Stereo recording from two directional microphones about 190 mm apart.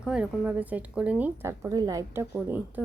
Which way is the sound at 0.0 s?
5° right (ahead or behind).